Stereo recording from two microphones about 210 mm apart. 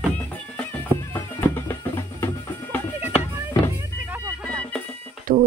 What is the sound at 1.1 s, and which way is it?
Music, 10° left (ahead or behind).